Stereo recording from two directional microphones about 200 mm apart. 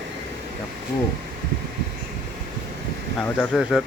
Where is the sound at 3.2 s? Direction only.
5° left (ahead or behind).